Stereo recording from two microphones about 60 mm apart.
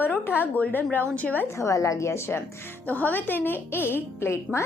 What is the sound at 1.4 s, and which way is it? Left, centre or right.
A woman's voice, left.